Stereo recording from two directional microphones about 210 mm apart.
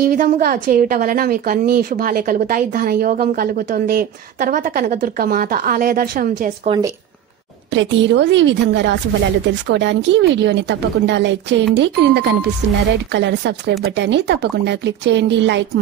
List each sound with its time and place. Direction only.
0.0 s a woman's voice: 45° right (ahead or behind)
7.7 s a woman's voice: 60° right (ahead or behind)